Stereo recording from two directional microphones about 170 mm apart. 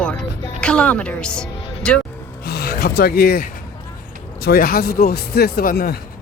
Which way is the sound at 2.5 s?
70° left (ahead or behind).